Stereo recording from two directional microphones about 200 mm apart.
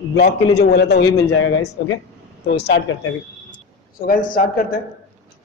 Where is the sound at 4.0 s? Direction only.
45° left (ahead or behind).